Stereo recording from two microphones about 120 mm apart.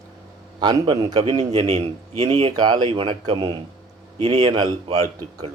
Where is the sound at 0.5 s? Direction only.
35° right (ahead or behind).